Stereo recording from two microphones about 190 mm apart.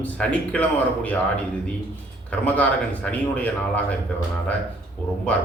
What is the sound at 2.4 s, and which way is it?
A man's voice, 10° left (ahead or behind).